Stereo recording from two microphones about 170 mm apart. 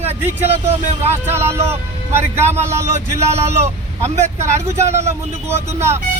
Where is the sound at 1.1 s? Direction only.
15° right (ahead or behind).